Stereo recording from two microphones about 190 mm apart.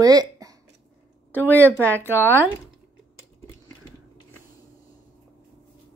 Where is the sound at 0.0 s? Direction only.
20° right (ahead or behind).